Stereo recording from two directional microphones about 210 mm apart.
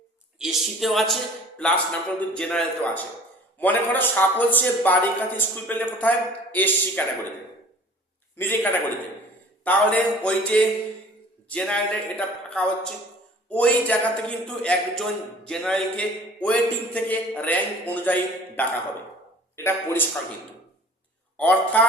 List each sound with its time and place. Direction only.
0.3 s a man's voice: centre (ahead or behind)
8.4 s a man's voice: 10° left (ahead or behind)
21.3 s speech: 5° left (ahead or behind)